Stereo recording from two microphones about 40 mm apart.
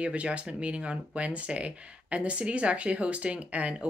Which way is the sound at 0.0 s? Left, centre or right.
Right.